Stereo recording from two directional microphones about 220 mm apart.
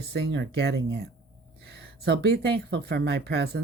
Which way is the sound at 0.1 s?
50° right (ahead or behind).